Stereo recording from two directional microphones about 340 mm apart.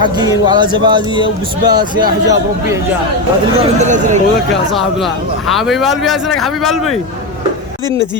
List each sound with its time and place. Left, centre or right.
0.0 s a man's voice: centre
3.8 s speech: right
4.7 s speech: centre